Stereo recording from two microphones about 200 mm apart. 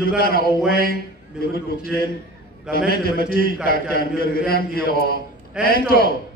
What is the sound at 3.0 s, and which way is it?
A man's voice, 50° left (ahead or behind).